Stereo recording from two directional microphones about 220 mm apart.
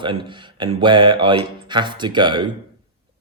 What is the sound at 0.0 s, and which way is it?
Speech, 20° right (ahead or behind).